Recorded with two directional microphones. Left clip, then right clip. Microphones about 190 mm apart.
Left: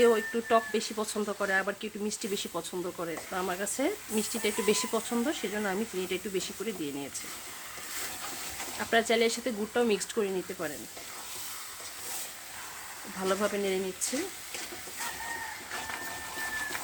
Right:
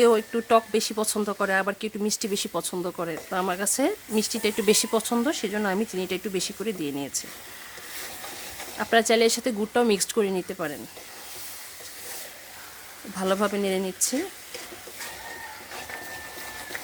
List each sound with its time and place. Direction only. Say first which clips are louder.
0.0 s speech: right 4 dB; 45° right (ahead or behind)
8.8 s speech: right 6 dB; 50° right (ahead or behind)
13.1 s speech: right 5 dB; 50° right (ahead or behind)